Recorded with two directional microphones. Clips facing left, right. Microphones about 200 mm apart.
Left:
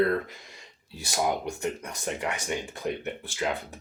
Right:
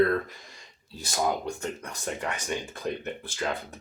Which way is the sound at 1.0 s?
15° left (ahead or behind).